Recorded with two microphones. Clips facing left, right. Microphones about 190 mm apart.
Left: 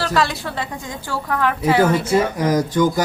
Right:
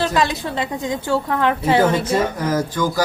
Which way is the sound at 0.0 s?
20° right (ahead or behind).